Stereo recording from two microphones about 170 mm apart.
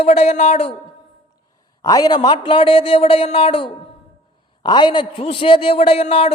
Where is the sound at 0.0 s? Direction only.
40° left (ahead or behind).